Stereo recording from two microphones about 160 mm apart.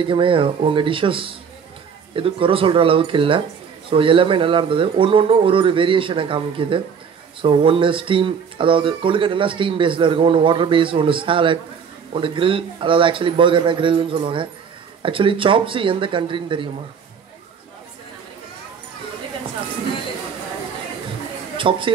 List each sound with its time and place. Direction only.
0.0 s speech: 30° right (ahead or behind)
21.5 s a woman's voice: 30° right (ahead or behind)